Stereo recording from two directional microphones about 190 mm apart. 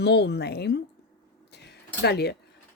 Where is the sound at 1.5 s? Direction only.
60° left (ahead or behind).